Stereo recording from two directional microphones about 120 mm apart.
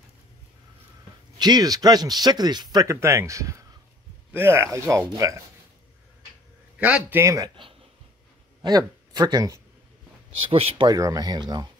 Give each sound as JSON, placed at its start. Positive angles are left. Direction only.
{"t": 1.4, "sound": "speech", "side_deg": -35}
{"t": 6.8, "sound": "a man's voice", "side_deg": -10}
{"t": 7.2, "sound": "speech", "side_deg": -25}
{"t": 7.4, "sound": "speech", "side_deg": -45}
{"t": 8.6, "sound": "speech", "side_deg": -35}
{"t": 10.5, "sound": "speech", "side_deg": -50}
{"t": 10.9, "sound": "speech", "side_deg": -30}